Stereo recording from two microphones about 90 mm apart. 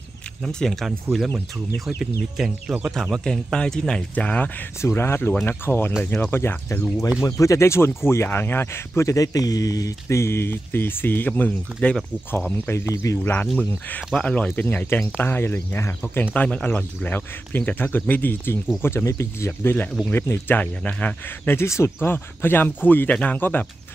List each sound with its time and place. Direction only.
0.4 s speech: 5° left (ahead or behind)
2.0 s speech: 5° right (ahead or behind); by 4.5 s 15° left (ahead or behind)
4.8 s speech: 25° left (ahead or behind)
12.6 s speech: 30° left (ahead or behind)
13.2 s speech: 20° left (ahead or behind)
16.2 s speech: 15° left (ahead or behind)
21.6 s speech: 30° left (ahead or behind)